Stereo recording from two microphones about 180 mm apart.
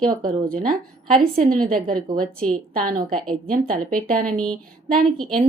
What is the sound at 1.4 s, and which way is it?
Speech, 50° right (ahead or behind).